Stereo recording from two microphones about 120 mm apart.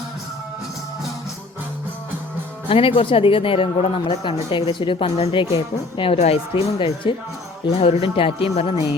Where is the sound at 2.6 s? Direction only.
50° left (ahead or behind).